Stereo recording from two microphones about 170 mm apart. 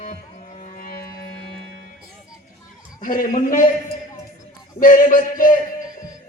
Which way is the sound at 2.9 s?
55° left (ahead or behind).